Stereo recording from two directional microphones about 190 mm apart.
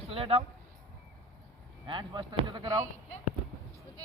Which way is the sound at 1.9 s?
25° right (ahead or behind).